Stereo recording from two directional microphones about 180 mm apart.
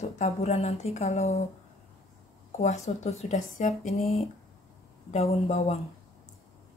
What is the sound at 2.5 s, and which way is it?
A woman's voice, 40° left (ahead or behind).